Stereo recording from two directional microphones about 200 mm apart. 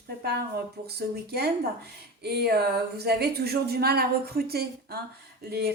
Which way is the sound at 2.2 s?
55° right (ahead or behind).